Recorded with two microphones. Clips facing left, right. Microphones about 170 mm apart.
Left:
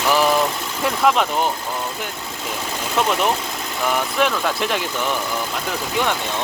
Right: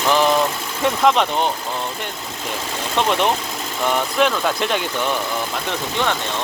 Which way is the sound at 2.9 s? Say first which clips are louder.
Right 1 dB; 5° left (ahead or behind).